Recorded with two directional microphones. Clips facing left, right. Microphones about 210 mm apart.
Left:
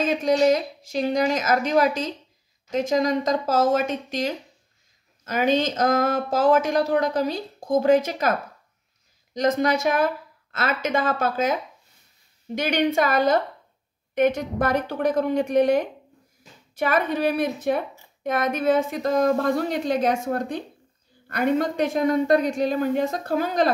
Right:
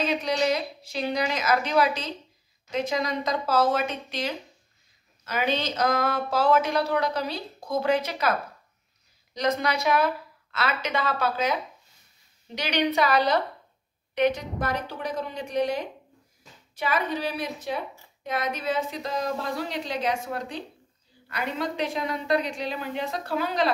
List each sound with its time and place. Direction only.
0.0 s a woman's voice: 45° left (ahead or behind)